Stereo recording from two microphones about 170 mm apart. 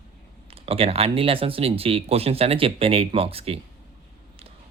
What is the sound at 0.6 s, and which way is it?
Speech, 35° right (ahead or behind).